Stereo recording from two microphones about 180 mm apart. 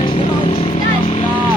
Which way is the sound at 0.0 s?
30° left (ahead or behind).